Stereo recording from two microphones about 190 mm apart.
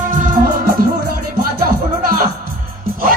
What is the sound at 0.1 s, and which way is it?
Music, 45° right (ahead or behind).